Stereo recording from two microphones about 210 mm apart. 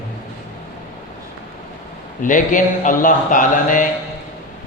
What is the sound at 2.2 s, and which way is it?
A man's voice, 40° left (ahead or behind).